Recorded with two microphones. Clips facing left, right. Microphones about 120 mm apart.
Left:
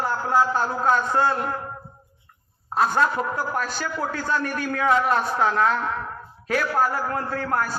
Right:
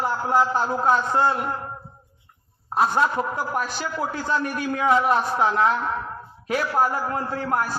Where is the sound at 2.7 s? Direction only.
15° right (ahead or behind).